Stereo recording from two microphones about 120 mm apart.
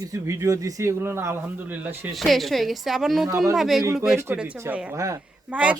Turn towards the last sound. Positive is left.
turn(degrees=-10)  # may be behind; listen again after turning